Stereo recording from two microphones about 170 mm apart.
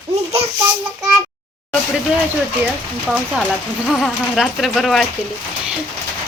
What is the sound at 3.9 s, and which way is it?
Speech, centre (ahead or behind).